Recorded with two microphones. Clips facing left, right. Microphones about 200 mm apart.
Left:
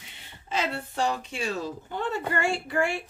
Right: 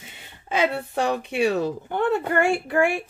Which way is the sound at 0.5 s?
60° right (ahead or behind).